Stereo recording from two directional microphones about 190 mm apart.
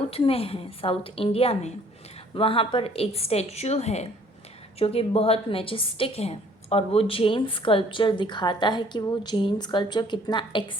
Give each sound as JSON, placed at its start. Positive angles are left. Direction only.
{"t": 0.1, "sound": "a woman's voice", "side_deg": 30}